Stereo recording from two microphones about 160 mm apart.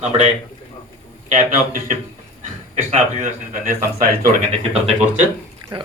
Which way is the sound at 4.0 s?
65° right (ahead or behind).